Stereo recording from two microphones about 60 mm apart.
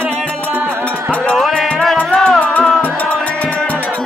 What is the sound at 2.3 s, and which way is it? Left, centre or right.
Music, left.